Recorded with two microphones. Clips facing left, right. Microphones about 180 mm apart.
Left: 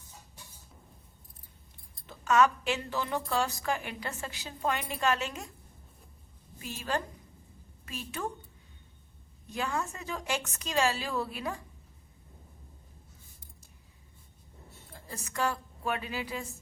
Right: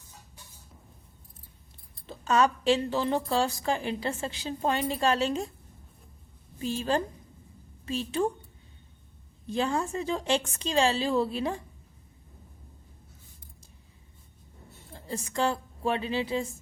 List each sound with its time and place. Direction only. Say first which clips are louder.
2.0 s a woman's voice: even; 30° right (ahead or behind)
6.6 s a woman's voice: right 6 dB; 30° right (ahead or behind)
9.5 s a woman's voice: right 6 dB; 30° right (ahead or behind)
14.9 s a woman's voice: right 5 dB; 25° right (ahead or behind)